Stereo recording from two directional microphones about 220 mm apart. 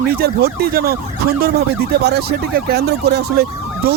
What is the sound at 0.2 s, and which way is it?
Speech, 45° right (ahead or behind).